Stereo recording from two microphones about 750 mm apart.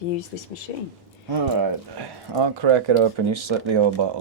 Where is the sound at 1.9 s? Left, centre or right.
Right.